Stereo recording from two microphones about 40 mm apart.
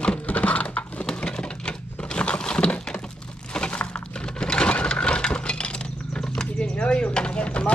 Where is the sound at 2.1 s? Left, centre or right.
Left.